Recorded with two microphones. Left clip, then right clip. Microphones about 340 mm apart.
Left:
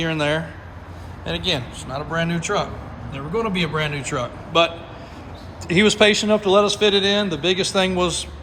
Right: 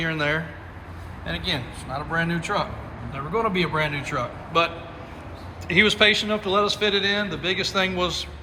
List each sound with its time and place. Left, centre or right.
0.0 s a man's voice: centre